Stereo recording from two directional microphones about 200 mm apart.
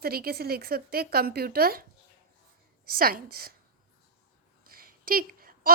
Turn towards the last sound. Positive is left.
turn(degrees=-45)  # may be behind; listen again after turning